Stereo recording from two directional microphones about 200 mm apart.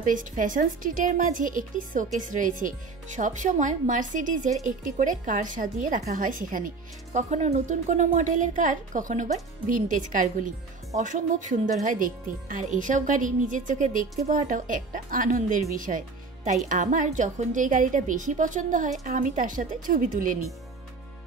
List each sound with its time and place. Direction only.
0.0 s a woman's voice: 40° right (ahead or behind)